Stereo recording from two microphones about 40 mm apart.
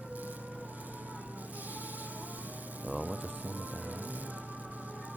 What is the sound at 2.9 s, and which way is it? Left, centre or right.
Music, right.